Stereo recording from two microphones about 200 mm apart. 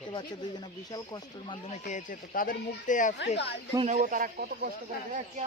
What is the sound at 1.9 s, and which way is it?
Speech, 40° left (ahead or behind).